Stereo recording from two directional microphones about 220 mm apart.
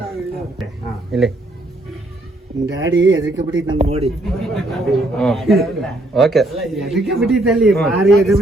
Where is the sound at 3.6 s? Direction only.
30° right (ahead or behind).